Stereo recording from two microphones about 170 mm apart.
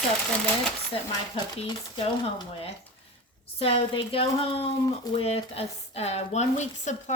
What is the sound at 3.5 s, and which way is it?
Speech, 35° left (ahead or behind).